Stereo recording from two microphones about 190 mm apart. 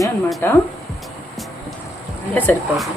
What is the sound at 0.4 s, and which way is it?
Speech, 10° left (ahead or behind).